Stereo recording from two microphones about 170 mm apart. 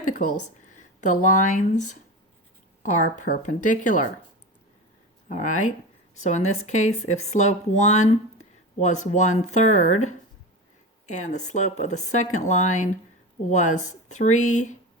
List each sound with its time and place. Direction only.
0.0 s a sound: 50° left (ahead or behind)
0.8 s speech: 50° left (ahead or behind)
3.2 s speech: 55° left (ahead or behind)
5.3 s speech: 45° left (ahead or behind)